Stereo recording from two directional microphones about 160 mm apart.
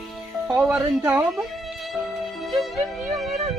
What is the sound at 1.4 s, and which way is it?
Music, centre (ahead or behind).